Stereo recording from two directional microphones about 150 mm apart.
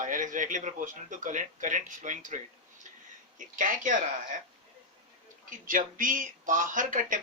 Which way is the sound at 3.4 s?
60° right (ahead or behind).